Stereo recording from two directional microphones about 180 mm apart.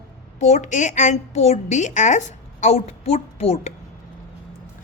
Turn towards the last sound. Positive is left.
turn(degrees=35)  # may be behind; listen again after turning